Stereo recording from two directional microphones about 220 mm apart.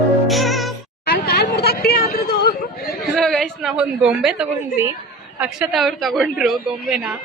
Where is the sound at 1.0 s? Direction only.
45° left (ahead or behind).